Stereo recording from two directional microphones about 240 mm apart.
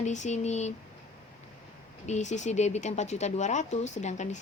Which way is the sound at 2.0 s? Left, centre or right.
Left.